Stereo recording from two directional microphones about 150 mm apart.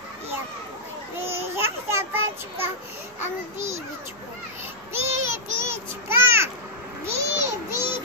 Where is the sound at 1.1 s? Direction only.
15° right (ahead or behind).